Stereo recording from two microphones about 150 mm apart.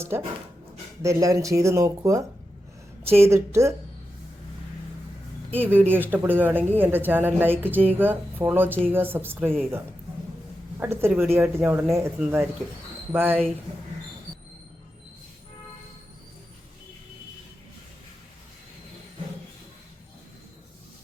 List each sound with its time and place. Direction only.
1.0 s a woman's voice: 20° right (ahead or behind)
5.5 s a woman's voice: 15° right (ahead or behind)